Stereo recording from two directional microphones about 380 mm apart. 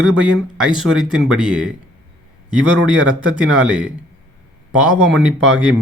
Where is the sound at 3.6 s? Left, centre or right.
Centre.